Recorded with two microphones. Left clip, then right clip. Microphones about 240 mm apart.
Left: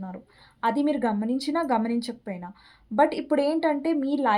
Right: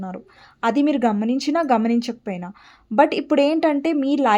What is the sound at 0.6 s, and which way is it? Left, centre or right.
Speech, right.